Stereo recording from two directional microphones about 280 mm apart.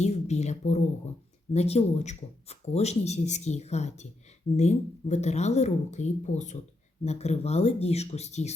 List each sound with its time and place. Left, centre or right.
0.0 s speech: left